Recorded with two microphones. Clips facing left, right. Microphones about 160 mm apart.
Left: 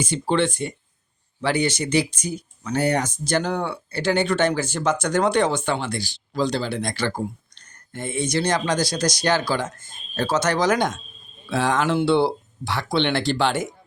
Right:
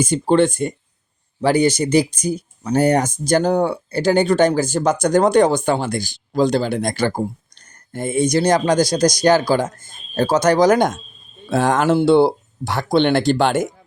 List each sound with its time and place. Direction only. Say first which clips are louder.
0.0 s speech: right 6 dB; 45° right (ahead or behind)